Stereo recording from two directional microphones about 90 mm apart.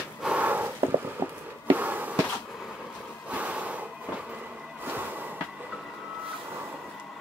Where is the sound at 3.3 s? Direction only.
15° right (ahead or behind).